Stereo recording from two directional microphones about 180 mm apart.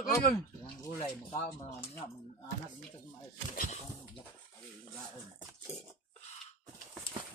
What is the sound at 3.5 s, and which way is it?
Speech, 45° left (ahead or behind).